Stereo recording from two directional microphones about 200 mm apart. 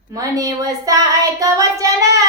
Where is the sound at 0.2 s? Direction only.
15° right (ahead or behind).